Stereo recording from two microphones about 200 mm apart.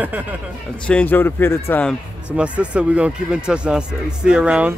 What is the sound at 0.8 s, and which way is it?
A man's voice, 5° left (ahead or behind).